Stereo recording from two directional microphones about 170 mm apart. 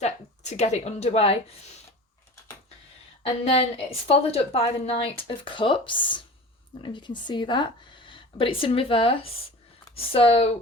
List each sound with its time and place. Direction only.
0.5 s a woman's voice: 40° left (ahead or behind)
3.2 s a woman's voice: 35° left (ahead or behind)